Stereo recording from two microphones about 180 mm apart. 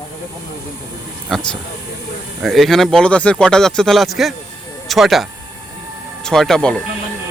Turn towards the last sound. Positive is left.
turn(degrees=5)  # may be behind; listen again after turning